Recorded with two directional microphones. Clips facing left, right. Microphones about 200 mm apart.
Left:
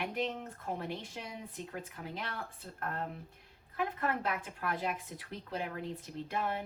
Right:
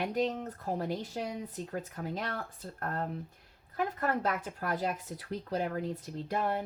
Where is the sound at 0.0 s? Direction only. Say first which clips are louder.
Right 5 dB; 40° right (ahead or behind).